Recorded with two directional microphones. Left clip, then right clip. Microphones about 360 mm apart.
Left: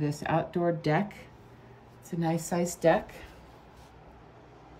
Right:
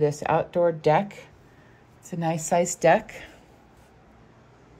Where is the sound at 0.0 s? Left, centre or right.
Centre.